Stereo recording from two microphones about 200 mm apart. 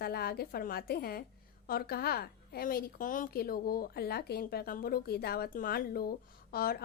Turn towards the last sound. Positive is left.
turn(degrees=50)  # may be behind; listen again after turning